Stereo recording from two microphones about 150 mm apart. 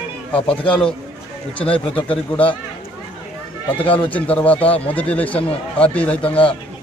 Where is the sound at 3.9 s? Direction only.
10° left (ahead or behind).